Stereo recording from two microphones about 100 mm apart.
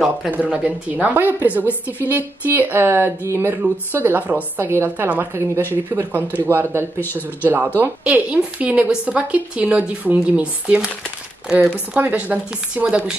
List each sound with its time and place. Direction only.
0.3 s a woman's voice: 15° right (ahead or behind)
7.0 s speech: 20° left (ahead or behind)
7.4 s speech: 20° right (ahead or behind)